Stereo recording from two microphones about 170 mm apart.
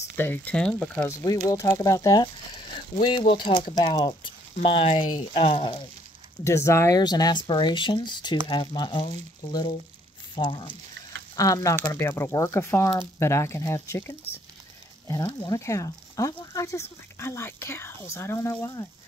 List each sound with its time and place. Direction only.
0.1 s speech: 10° left (ahead or behind)
1.0 s speech: 20° left (ahead or behind)
3.0 s speech: 30° left (ahead or behind)
6.4 s speech: 15° left (ahead or behind)